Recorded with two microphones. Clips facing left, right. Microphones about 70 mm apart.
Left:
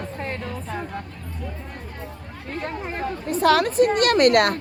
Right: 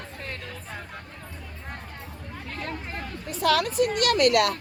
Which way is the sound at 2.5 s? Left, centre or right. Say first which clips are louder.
Left 6 dB; left.